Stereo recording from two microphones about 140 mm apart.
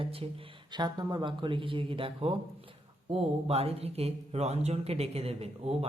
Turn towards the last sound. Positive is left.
turn(degrees=-45)  # may be behind; listen again after turning